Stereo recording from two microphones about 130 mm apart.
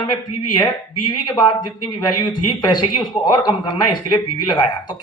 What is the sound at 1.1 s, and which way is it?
Speech, 35° left (ahead or behind).